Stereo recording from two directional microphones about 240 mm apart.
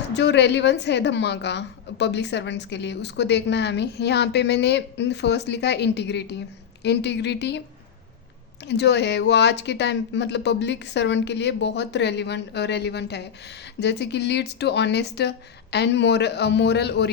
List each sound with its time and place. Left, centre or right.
0.1 s speech: left
8.6 s speech: left